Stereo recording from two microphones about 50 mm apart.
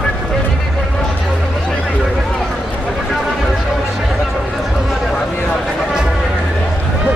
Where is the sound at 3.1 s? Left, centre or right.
Centre.